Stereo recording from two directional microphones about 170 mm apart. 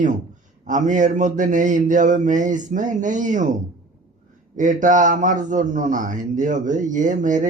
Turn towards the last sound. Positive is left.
turn(degrees=-50)  # may be behind; listen again after turning